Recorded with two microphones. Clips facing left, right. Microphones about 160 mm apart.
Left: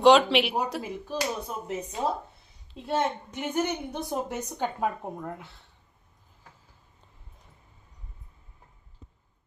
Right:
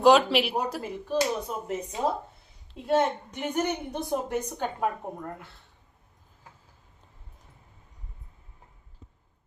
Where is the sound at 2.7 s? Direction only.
Centre (ahead or behind).